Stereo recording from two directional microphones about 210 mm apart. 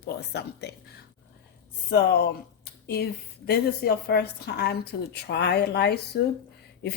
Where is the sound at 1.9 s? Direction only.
50° left (ahead or behind).